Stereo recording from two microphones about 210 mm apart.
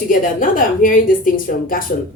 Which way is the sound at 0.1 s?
40° left (ahead or behind).